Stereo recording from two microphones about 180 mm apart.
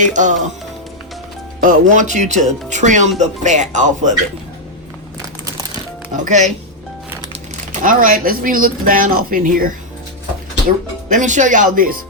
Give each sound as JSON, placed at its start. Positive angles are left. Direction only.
{"t": 0.0, "sound": "speech", "side_deg": -45}
{"t": 1.6, "sound": "speech", "side_deg": -45}
{"t": 6.2, "sound": "speech", "side_deg": -40}
{"t": 7.7, "sound": "speech", "side_deg": -50}
{"t": 11.1, "sound": "speech", "side_deg": -45}